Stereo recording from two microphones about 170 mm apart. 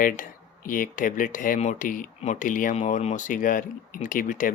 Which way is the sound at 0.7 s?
55° left (ahead or behind).